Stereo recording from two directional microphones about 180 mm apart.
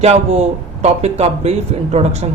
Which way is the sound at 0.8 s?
35° right (ahead or behind).